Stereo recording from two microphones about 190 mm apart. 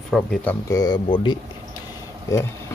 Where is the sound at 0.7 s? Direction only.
20° left (ahead or behind).